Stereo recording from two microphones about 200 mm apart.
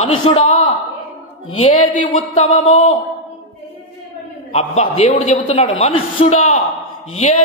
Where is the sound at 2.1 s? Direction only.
35° left (ahead or behind).